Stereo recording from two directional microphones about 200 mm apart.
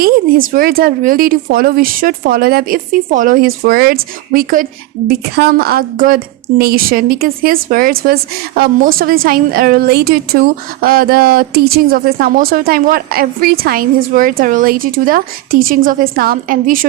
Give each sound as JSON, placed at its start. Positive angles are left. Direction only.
{"t": 0.0, "sound": "a woman's voice", "side_deg": -45}